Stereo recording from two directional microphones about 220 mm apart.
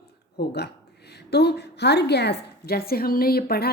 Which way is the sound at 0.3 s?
50° left (ahead or behind).